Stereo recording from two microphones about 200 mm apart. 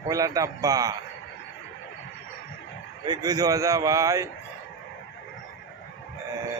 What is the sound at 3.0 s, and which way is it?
A man's voice, 20° right (ahead or behind).